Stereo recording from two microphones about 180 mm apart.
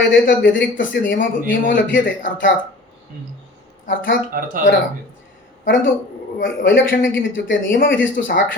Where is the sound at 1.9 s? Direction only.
90° left.